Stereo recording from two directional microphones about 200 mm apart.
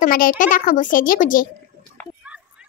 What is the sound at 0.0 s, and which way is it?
A child's voice, 45° left (ahead or behind).